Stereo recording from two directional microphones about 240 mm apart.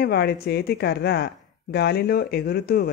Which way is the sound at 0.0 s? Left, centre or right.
Left.